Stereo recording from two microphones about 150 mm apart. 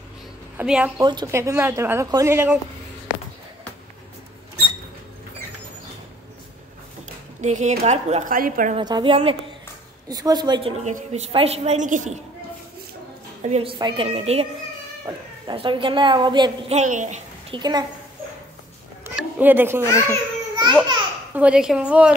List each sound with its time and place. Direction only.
0.6 s speech: 10° right (ahead or behind)
0.9 s speech: 25° right (ahead or behind)
7.4 s speech: 50° right (ahead or behind)
8.7 s speech: 30° right (ahead or behind)
10.0 s a woman's voice: 25° right (ahead or behind)
10.8 s a woman's voice: 50° right (ahead or behind)
13.5 s speech: 40° right (ahead or behind)
16.7 s a woman's voice: 55° right (ahead or behind)
17.5 s a woman's voice: 30° right (ahead or behind)
19.1 s a sound: 10° right (ahead or behind)
20.1 s babbling: 30° right (ahead or behind)
21.3 s speech: 10° right (ahead or behind)